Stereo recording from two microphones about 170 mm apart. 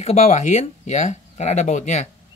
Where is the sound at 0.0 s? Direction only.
40° left (ahead or behind).